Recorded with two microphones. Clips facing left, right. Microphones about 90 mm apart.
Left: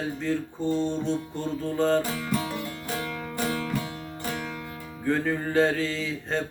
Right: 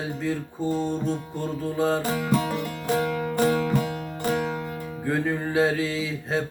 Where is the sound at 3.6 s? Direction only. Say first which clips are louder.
Right 6 dB; 30° right (ahead or behind).